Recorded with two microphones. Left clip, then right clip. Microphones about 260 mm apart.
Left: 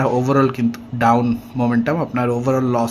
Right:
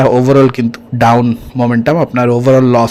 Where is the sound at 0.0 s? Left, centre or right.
Right.